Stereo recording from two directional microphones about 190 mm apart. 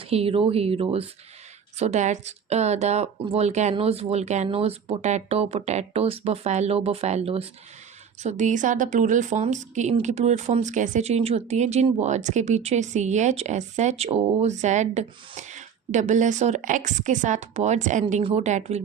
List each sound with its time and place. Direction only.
0.0 s speech: 30° right (ahead or behind)